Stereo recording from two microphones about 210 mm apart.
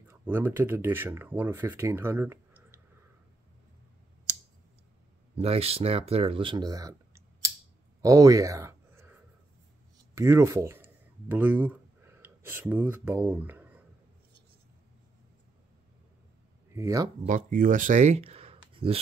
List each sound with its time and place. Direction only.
0.1 s speech: 10° right (ahead or behind)
5.4 s speech: 30° right (ahead or behind)
8.0 s a sound: 15° right (ahead or behind)
10.1 s speech: 15° right (ahead or behind)
16.7 s speech: 15° right (ahead or behind)
17.5 s speech: 40° right (ahead or behind)